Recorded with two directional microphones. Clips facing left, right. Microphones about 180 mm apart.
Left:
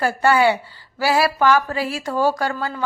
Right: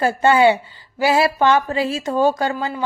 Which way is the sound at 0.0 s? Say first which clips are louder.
Right 2 dB; 20° right (ahead or behind).